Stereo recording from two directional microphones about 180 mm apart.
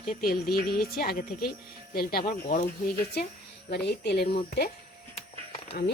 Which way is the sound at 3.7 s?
65° left (ahead or behind).